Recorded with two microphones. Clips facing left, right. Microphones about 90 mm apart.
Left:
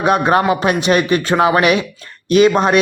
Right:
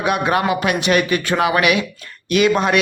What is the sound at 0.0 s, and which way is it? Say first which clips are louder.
Speech: left 4 dB; 35° left (ahead or behind).